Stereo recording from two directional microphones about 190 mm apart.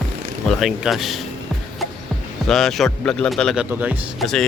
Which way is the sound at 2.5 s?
Centre (ahead or behind).